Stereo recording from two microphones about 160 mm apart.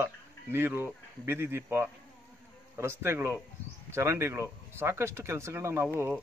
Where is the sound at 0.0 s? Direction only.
15° right (ahead or behind).